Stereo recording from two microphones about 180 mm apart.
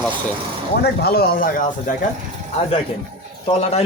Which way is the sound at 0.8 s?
60° left (ahead or behind).